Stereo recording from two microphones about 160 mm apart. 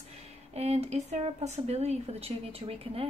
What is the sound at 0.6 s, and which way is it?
A woman's voice, 40° right (ahead or behind).